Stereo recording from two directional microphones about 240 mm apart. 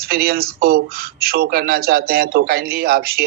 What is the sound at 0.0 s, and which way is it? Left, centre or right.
A man's voice, right.